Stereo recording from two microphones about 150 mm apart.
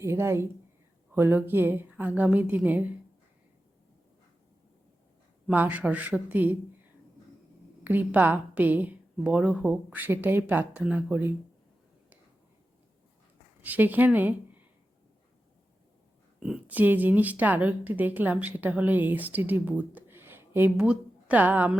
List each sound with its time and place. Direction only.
0.0 s speech: 15° right (ahead or behind)
5.5 s speech: 10° right (ahead or behind)
7.9 s speech: 10° right (ahead or behind)
13.6 s speech: 10° right (ahead or behind)
16.4 s speech: 5° right (ahead or behind)